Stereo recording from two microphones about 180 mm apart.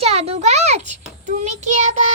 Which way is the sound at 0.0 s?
35° right (ahead or behind).